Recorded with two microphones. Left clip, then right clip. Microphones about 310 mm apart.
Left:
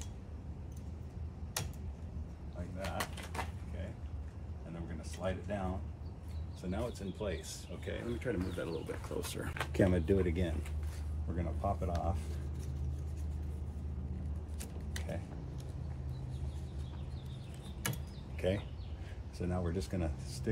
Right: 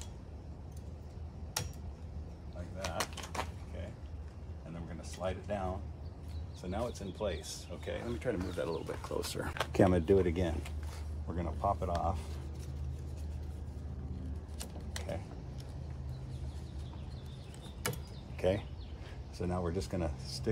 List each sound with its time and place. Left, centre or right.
1.6 s tick-tock: centre
4.7 s a sound: centre
6.6 s speech: centre
14.6 s mechanisms: centre
18.4 s speech: centre